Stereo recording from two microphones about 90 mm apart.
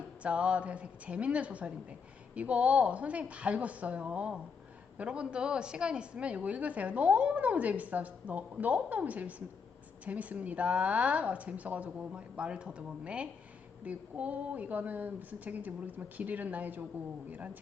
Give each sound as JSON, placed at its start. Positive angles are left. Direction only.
{"t": 0.2, "sound": "a woman's voice", "side_deg": -15}